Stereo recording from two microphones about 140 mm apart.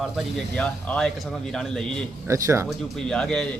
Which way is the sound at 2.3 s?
20° right (ahead or behind).